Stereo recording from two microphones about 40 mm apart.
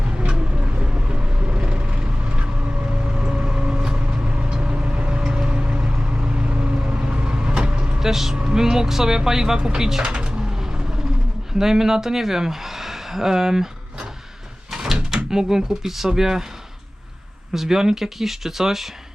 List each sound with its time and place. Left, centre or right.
0.2 s vehicle: right
5.1 s vehicle: centre
7.9 s speech: centre
8.4 s speech: centre
9.6 s a sound: centre
11.5 s speech: centre
14.7 s speech: centre
17.5 s speech: centre